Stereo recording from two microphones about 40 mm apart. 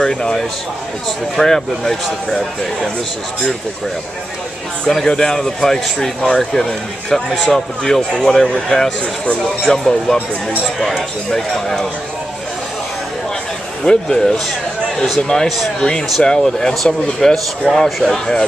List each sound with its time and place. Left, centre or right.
0.0 s speech: centre
1.4 s speech: centre
5.0 s speech: centre
11.3 s speech: centre
13.8 s speech: centre
15.4 s speech: centre
15.8 s speech: centre